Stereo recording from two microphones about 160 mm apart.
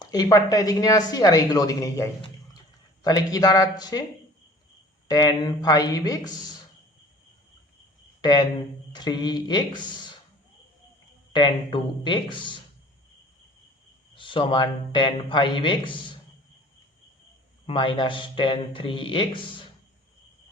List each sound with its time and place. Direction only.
0.1 s speech: 25° left (ahead or behind)
5.0 s speech: 25° left (ahead or behind)
8.2 s speech: 25° left (ahead or behind)
11.3 s speech: 30° left (ahead or behind)
14.2 s speech: 30° left (ahead or behind)
17.7 s speech: 30° left (ahead or behind)